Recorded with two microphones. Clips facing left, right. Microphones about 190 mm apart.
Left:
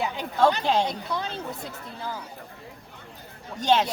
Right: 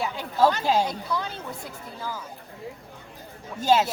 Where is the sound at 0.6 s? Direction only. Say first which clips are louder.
Right 1 dB; 5° right (ahead or behind).